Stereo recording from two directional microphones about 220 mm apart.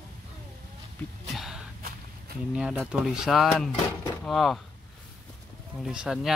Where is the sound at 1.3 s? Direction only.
Centre (ahead or behind).